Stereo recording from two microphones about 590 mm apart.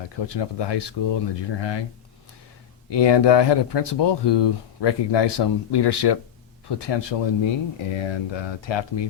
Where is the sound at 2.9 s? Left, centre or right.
Left.